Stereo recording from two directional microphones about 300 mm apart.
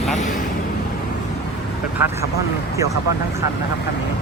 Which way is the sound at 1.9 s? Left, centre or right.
Centre.